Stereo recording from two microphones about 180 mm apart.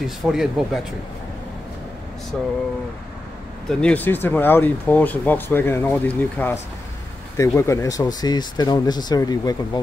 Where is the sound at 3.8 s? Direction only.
10° left (ahead or behind).